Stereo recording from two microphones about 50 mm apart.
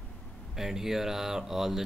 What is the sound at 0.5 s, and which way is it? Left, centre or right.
Speech, centre.